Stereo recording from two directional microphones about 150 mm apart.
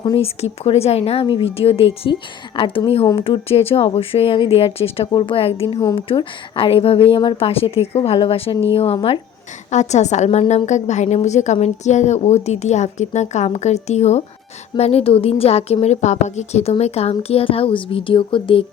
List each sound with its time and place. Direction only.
0.0 s a woman's voice: 35° left (ahead or behind)
9.7 s a woman's voice: 50° left (ahead or behind)